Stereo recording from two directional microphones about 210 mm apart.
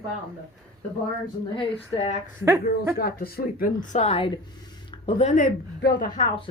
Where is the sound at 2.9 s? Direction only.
45° left (ahead or behind).